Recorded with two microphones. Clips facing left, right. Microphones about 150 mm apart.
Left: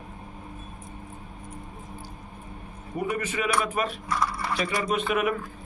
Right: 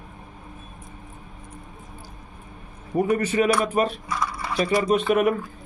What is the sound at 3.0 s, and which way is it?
Speech, 40° right (ahead or behind).